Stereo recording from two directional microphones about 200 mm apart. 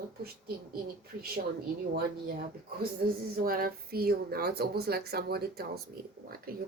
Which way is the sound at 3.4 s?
45° right (ahead or behind).